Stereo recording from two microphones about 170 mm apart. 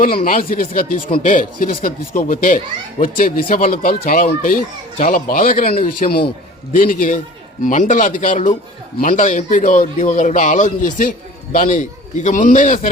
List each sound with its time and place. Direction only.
0.3 s speech: 55° left (ahead or behind)
6.7 s speech: 55° left (ahead or behind)